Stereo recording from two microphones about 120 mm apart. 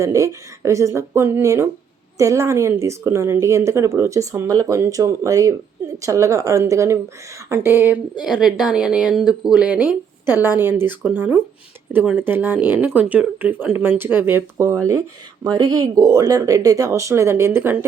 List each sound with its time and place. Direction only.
0.0 s speech: 25° right (ahead or behind)
8.2 s speech: 5° right (ahead or behind)